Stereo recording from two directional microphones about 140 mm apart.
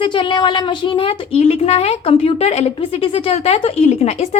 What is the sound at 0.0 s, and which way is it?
A woman's voice, 35° left (ahead or behind).